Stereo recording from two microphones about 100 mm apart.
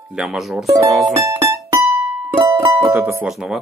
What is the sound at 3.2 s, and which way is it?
Speech, 10° right (ahead or behind).